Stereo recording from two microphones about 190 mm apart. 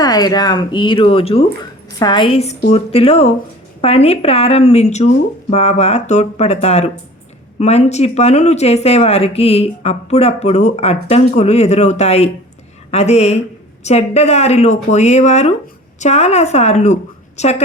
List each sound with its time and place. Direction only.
0.0 s speech: 20° left (ahead or behind); by 17.6 s 35° left (ahead or behind)